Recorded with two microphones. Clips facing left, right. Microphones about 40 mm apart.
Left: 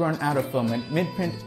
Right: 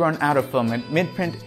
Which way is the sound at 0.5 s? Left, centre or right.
Right.